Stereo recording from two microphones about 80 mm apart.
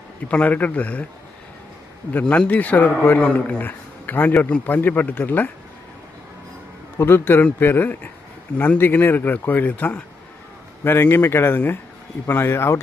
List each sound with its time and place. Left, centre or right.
0.3 s a man's voice: centre
2.1 s a man's voice: centre
7.0 s a man's voice: left